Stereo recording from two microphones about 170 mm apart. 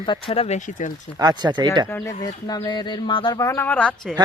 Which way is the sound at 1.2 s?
25° right (ahead or behind).